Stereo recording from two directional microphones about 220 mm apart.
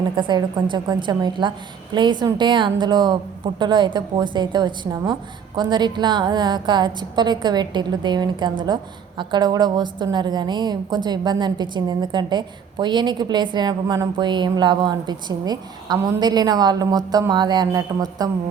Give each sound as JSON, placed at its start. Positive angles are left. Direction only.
{"t": 0.2, "sound": "a woman's voice", "side_deg": -20}